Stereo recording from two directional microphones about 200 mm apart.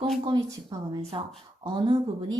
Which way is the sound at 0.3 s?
20° right (ahead or behind).